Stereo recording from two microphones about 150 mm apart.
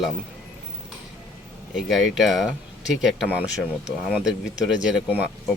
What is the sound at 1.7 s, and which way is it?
Speech, centre (ahead or behind).